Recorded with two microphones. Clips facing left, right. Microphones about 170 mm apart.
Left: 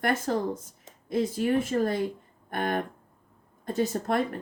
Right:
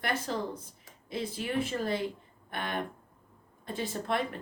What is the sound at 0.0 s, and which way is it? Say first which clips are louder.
Speech: left 6 dB; 45° left (ahead or behind).